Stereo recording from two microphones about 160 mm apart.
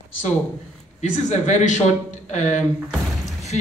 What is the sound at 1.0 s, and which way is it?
Speech, 45° left (ahead or behind).